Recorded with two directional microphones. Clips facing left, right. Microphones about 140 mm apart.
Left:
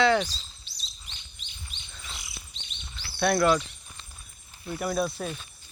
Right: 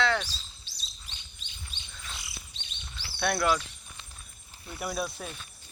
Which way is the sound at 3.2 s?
5° right (ahead or behind).